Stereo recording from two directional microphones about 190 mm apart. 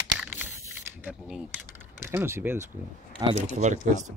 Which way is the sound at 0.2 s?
10° right (ahead or behind).